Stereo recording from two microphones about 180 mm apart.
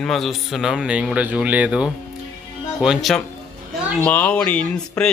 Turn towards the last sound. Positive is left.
turn(degrees=5)  # may be behind; listen again after turning